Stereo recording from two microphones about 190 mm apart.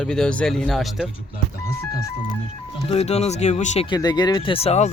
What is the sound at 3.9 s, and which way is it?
Speech, 20° left (ahead or behind).